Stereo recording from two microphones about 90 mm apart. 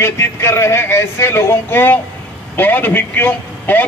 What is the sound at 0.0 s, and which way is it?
A man's voice, 30° left (ahead or behind).